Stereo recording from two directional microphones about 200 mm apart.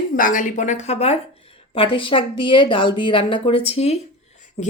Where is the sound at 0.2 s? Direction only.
40° left (ahead or behind).